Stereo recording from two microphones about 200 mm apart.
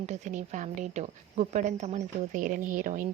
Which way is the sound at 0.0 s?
35° right (ahead or behind).